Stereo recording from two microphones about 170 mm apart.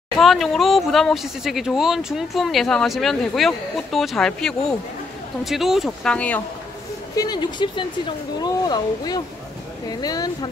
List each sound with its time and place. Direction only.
0.2 s speech: centre (ahead or behind)
7.2 s speech: 25° left (ahead or behind)